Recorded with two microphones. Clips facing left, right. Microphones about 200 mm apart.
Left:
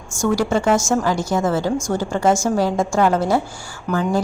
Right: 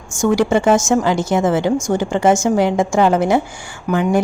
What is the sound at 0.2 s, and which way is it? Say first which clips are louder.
A woman's voice: right 4 dB; 20° right (ahead or behind).